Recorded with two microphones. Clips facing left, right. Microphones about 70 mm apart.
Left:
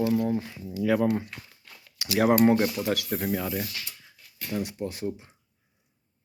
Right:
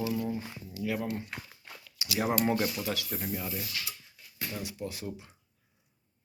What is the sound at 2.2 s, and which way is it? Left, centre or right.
Speech, left.